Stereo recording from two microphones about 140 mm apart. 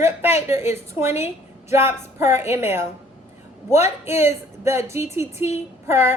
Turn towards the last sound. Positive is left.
turn(degrees=-15)  # may be behind; listen again after turning